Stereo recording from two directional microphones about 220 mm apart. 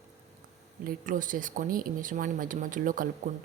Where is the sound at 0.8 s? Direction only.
40° right (ahead or behind).